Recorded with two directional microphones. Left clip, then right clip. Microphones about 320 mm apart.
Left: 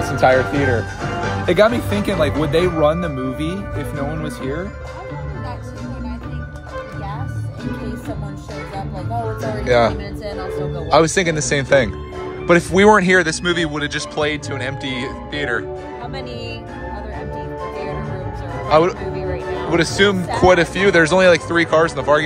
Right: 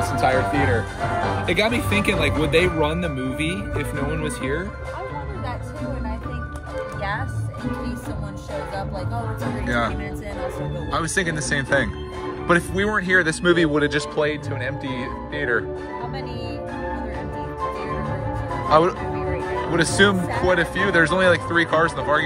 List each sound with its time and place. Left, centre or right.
0.0 s speech: left
4.1 s speech: centre
9.7 s speech: centre
18.7 s speech: centre